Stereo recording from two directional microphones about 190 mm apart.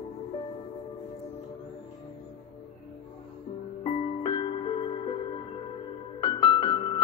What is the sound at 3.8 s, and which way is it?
Music, 25° left (ahead or behind).